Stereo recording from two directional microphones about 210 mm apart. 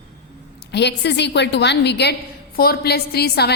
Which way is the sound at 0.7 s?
55° left (ahead or behind).